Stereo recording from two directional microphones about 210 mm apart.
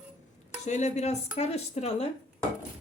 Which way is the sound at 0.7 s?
35° left (ahead or behind).